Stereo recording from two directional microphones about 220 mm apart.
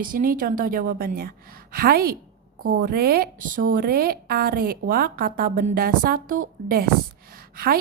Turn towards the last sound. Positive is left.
turn(degrees=-45)  # may be behind; listen again after turning